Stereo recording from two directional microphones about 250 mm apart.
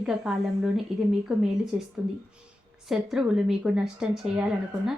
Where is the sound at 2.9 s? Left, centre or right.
Centre.